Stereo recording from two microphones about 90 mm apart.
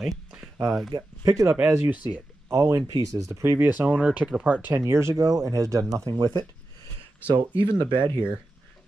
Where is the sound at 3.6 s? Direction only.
20° right (ahead or behind).